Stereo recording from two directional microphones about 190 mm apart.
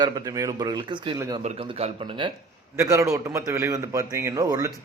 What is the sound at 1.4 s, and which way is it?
Speech, 35° right (ahead or behind).